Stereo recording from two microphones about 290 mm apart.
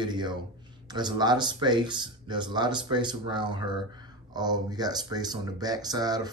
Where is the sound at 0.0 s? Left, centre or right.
Centre.